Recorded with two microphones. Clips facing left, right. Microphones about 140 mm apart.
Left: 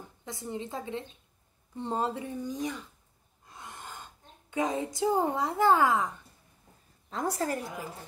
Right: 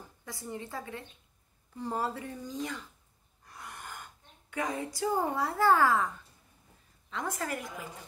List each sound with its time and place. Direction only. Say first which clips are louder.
0.2 s speech: left 3 dB; 20° left (ahead or behind)
3.4 s a sound: left 1 dB; 25° left (ahead or behind)
7.1 s a woman's voice: left 4 dB; 35° left (ahead or behind)